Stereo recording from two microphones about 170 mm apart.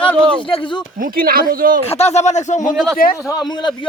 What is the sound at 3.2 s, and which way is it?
Speech, 20° left (ahead or behind).